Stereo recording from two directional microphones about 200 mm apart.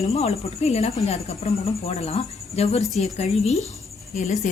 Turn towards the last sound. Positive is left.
turn(degrees=35)  # may be behind; listen again after turning